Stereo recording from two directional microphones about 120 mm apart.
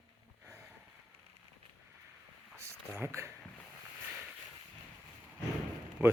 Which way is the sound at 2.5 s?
20° right (ahead or behind).